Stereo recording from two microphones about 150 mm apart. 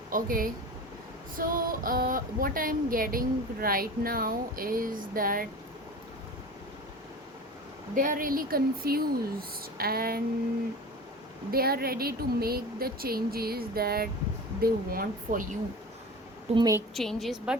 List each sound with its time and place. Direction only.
0.1 s speech: 70° right (ahead or behind)
7.9 s speech: 65° right (ahead or behind); by 10.2 s 90° right
11.5 s speech: 90° right
14.6 s speech: 75° right (ahead or behind)
16.6 s a woman's voice: 25° right (ahead or behind)
16.9 s a woman's voice: centre (ahead or behind)